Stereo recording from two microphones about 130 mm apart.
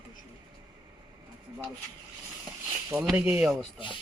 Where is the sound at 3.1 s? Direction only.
10° right (ahead or behind).